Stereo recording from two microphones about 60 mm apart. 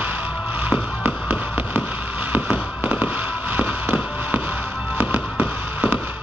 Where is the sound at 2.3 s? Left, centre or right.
Right.